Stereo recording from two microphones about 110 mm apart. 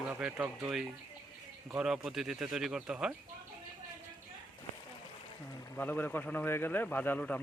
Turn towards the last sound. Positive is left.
turn(degrees=15)  # may be behind; listen again after turning